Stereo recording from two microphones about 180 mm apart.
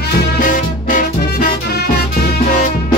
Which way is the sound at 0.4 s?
45° left (ahead or behind).